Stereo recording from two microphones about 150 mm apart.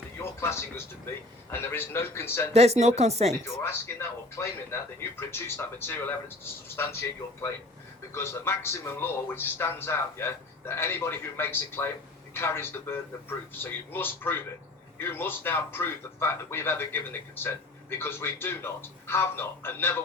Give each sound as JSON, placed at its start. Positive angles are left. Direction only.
{"t": 0.2, "sound": "a sound", "side_deg": 20}
{"t": 1.5, "sound": "speech", "side_deg": 15}
{"t": 2.5, "sound": "speech", "side_deg": -45}
{"t": 3.4, "sound": "speech", "side_deg": 15}
{"t": 8.1, "sound": "speech", "side_deg": 15}